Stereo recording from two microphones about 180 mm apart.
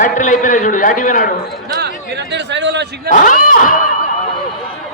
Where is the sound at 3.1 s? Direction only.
45° left (ahead or behind).